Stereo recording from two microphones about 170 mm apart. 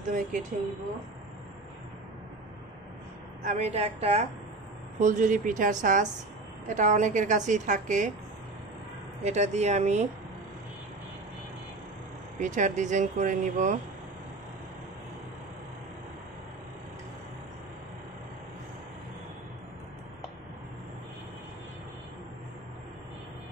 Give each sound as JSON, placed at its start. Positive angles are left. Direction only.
{"t": 0.1, "sound": "speech", "side_deg": -50}
{"t": 3.4, "sound": "a woman's voice", "side_deg": -40}
{"t": 5.0, "sound": "speech", "side_deg": -50}
{"t": 9.2, "sound": "a woman's voice", "side_deg": -40}
{"t": 12.4, "sound": "speech", "side_deg": -45}